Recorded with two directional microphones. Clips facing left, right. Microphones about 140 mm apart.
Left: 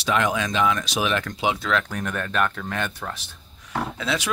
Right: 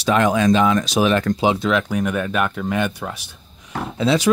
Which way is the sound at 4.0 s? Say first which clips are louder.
Right 12 dB; 30° right (ahead or behind).